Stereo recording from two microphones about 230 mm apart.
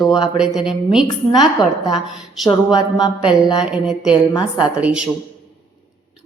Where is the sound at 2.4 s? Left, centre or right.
Centre.